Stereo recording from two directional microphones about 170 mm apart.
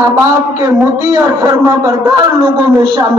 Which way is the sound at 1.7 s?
20° right (ahead or behind).